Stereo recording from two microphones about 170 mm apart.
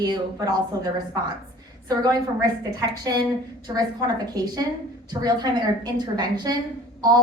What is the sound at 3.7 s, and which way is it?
Speech, 20° right (ahead or behind).